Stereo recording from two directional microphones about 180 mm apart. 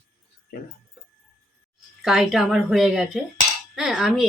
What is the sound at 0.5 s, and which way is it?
Speech, 55° left (ahead or behind).